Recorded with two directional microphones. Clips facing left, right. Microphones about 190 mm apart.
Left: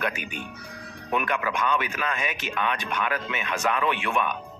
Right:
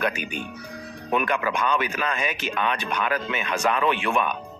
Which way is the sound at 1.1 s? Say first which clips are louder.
Right 3 dB; 30° right (ahead or behind).